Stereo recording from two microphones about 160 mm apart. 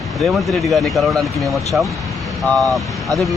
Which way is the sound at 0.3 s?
Centre (ahead or behind).